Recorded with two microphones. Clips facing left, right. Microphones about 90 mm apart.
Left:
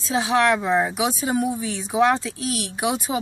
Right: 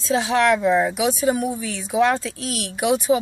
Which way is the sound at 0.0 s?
15° left (ahead or behind).